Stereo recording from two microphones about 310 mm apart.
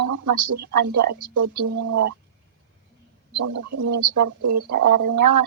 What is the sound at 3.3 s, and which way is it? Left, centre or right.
A woman's voice, right.